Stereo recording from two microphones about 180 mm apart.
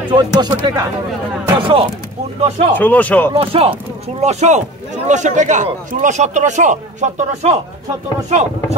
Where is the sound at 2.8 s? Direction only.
10° left (ahead or behind).